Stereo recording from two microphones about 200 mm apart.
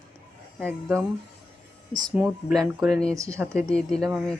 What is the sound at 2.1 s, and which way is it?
Speech, 5° right (ahead or behind).